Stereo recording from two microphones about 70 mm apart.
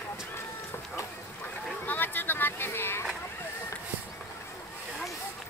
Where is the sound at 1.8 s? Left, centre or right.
Left.